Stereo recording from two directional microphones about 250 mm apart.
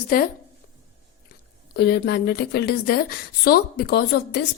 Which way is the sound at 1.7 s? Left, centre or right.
Left.